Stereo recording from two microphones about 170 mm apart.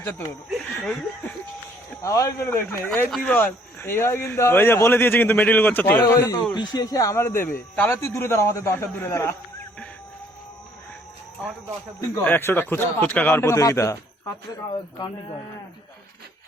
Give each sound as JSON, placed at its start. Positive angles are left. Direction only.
{"t": 0.8, "sound": "speech", "side_deg": 10}
{"t": 12.2, "sound": "speech", "side_deg": 10}